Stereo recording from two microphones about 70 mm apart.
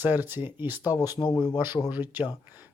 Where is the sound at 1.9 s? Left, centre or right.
Right.